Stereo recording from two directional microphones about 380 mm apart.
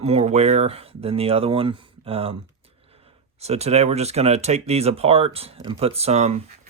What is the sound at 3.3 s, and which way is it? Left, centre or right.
Speech, centre.